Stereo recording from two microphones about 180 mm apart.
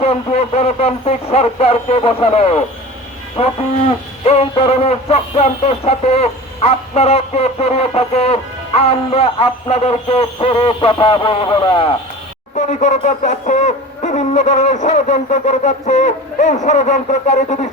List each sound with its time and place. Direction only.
0.0 s speech: 35° left (ahead or behind)
12.5 s speech: 40° left (ahead or behind)